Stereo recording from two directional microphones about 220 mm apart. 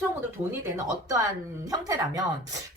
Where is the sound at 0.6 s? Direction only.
15° right (ahead or behind).